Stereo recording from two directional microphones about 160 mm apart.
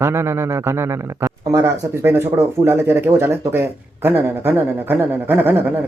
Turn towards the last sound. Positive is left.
turn(degrees=-10)  # may be behind; listen again after turning